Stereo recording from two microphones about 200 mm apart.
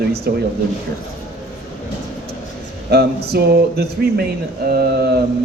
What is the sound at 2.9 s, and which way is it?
Speech, 50° right (ahead or behind).